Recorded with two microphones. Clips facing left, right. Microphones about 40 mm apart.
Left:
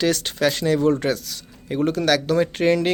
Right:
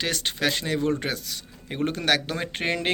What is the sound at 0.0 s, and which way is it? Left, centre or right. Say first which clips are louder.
Speech: left 6 dB; centre.